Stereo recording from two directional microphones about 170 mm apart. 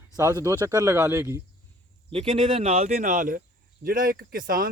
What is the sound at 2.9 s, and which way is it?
Speech, 50° right (ahead or behind).